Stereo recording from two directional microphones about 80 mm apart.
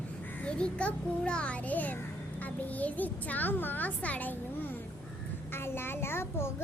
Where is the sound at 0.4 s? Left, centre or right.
Centre.